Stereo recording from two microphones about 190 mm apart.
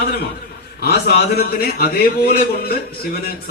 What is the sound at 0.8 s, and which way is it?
A man's voice, 55° left (ahead or behind).